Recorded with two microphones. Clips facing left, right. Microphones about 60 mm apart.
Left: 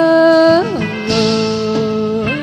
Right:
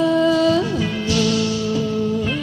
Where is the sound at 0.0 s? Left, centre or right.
Left.